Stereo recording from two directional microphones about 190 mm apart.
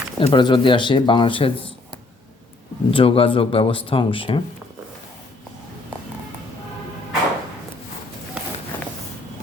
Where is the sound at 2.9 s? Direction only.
30° left (ahead or behind).